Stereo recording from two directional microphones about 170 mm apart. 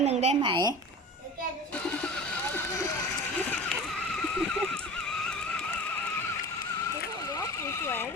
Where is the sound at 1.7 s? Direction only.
5° left (ahead or behind).